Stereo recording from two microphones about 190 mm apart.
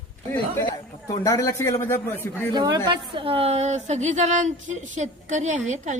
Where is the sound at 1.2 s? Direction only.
15° left (ahead or behind).